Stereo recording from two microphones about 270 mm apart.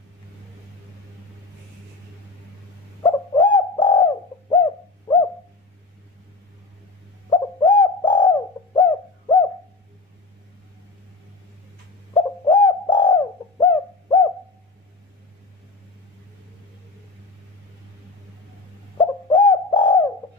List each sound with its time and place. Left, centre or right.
3.0 s bird: centre
7.2 s bird: centre
12.1 s bird: centre
18.9 s bird: centre